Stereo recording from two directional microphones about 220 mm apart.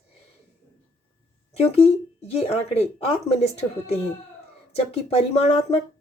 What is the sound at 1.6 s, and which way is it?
Speech, 25° left (ahead or behind).